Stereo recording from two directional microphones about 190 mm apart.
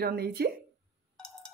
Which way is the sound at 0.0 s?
55° right (ahead or behind).